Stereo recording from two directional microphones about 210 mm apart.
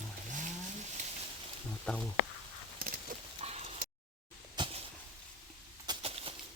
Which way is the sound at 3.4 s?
30° right (ahead or behind).